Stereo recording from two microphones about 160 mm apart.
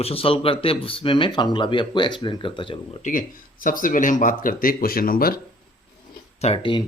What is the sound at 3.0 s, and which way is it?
Speech, 55° left (ahead or behind).